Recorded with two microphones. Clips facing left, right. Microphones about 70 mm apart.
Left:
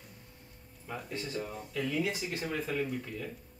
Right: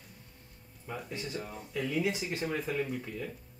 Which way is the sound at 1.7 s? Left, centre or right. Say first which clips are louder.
Right 2 dB; centre.